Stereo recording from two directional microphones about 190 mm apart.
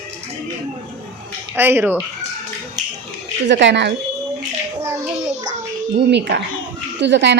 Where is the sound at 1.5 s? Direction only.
10° right (ahead or behind).